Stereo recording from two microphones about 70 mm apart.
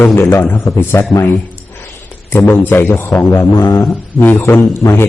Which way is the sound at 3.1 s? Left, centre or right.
Left.